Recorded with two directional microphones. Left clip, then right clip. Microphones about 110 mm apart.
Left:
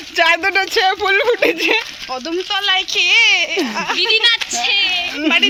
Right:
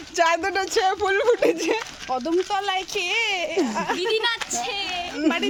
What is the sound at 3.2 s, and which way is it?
Speech, 35° right (ahead or behind).